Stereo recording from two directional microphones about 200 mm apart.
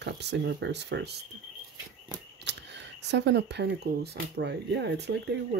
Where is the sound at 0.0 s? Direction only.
55° right (ahead or behind).